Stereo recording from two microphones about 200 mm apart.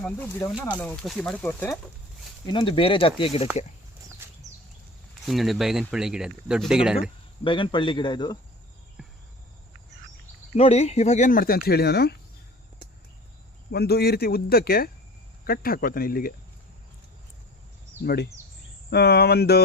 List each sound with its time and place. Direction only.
0.0 s speech: 10° left (ahead or behind)
2.5 s speech: 25° left (ahead or behind)
5.2 s speech: centre (ahead or behind)
7.4 s speech: 25° left (ahead or behind)
10.5 s speech: 35° left (ahead or behind); by 12.1 s 50° left (ahead or behind)
13.7 s speech: 50° left (ahead or behind)
18.0 s speech: 55° left (ahead or behind)